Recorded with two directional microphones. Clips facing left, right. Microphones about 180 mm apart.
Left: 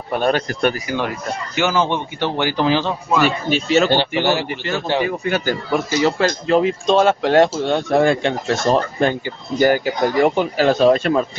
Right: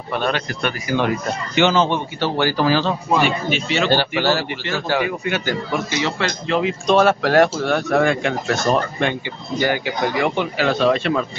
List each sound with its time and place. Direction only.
0.1 s speech: 45° left (ahead or behind)
1.6 s speech: 10° left (ahead or behind)
3.3 s speech: 40° left (ahead or behind)
3.9 s speech: 20° left (ahead or behind)
5.0 s speech: 35° left (ahead or behind)
6.9 s speech: 20° left (ahead or behind)
9.6 s speech: 40° left (ahead or behind)